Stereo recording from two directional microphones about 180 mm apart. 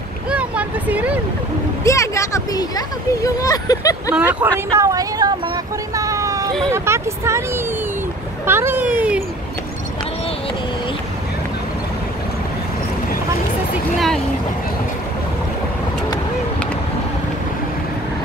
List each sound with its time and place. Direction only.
0.3 s vehicle: 5° right (ahead or behind)
1.9 s speech: 15° left (ahead or behind)
4.1 s speech: 10° right (ahead or behind)
5.9 s a sound: 20° right (ahead or behind)
6.7 s speech: 15° right (ahead or behind)
13.9 s speech: centre (ahead or behind)